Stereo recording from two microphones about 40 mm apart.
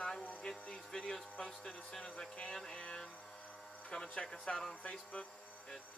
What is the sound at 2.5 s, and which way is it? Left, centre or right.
Speech, centre.